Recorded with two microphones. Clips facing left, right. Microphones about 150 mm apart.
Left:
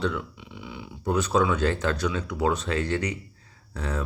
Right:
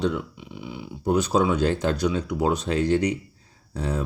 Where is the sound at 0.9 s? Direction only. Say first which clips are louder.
Right 4 dB; 25° right (ahead or behind).